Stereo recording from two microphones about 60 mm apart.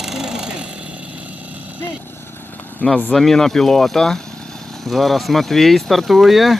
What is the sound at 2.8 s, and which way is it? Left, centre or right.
Speech, left.